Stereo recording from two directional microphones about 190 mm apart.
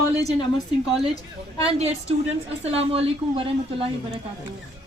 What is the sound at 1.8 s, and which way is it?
A woman's voice, 35° right (ahead or behind).